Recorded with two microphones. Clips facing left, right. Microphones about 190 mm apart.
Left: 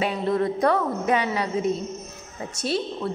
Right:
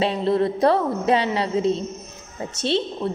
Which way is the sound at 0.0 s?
30° right (ahead or behind).